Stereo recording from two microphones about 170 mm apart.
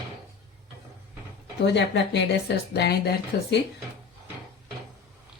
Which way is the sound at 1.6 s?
90° left.